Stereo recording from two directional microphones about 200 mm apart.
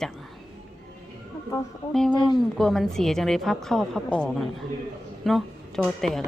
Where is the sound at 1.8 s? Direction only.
20° left (ahead or behind).